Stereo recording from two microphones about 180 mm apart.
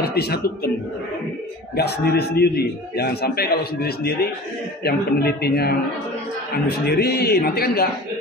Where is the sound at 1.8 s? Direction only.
65° left (ahead or behind).